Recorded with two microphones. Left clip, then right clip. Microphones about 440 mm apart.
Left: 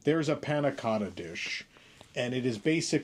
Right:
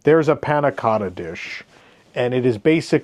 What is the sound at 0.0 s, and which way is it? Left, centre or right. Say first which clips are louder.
Speech: right 14 dB; right.